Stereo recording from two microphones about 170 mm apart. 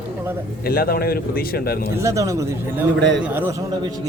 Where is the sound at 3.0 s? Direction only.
90° right.